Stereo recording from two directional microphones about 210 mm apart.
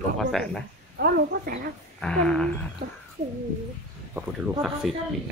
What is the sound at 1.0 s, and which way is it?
Speech, 45° right (ahead or behind).